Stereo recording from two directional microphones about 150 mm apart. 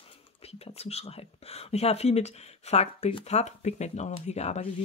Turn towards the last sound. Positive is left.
turn(degrees=45)  # may be behind; listen again after turning